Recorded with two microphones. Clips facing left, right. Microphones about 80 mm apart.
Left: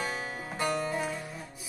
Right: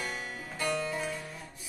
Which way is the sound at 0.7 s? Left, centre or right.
Left.